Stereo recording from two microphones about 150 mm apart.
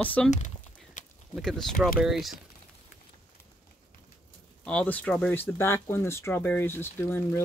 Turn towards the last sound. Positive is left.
turn(degrees=15)  # may be behind; listen again after turning